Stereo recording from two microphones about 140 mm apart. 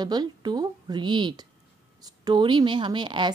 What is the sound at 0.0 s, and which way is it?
A woman's voice, 30° right (ahead or behind).